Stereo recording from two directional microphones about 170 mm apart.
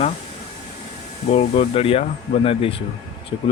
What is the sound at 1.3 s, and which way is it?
Speech, 40° left (ahead or behind).